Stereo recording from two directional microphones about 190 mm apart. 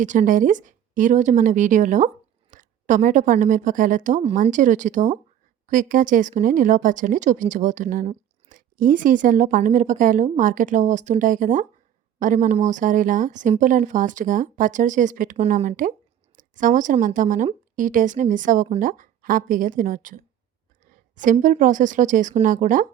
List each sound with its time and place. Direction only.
0.0 s a woman's voice: 40° right (ahead or behind)
21.4 s speech: 45° right (ahead or behind)